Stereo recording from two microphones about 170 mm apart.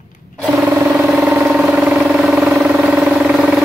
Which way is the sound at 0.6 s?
10° right (ahead or behind).